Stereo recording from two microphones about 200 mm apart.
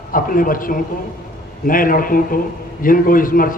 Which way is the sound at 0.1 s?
45° left (ahead or behind).